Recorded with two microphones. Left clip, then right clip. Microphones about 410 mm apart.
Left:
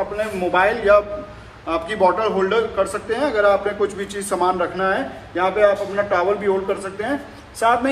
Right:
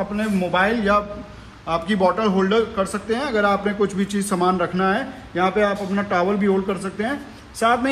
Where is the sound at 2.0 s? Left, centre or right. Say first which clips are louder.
Left 2 dB; centre.